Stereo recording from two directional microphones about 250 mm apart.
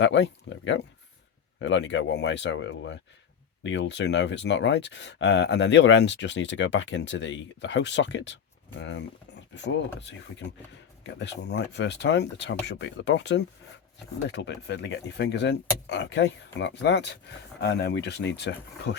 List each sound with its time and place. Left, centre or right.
0.0 s speech: left